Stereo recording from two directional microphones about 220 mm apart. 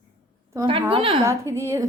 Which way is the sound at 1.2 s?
10° right (ahead or behind).